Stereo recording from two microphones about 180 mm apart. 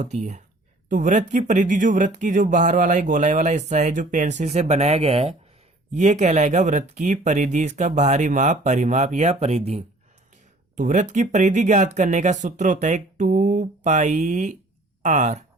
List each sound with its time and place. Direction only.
0.0 s speech: 40° right (ahead or behind)